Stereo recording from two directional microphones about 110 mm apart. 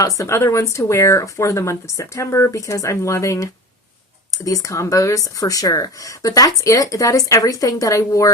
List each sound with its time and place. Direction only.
0.2 s speech: 25° left (ahead or behind)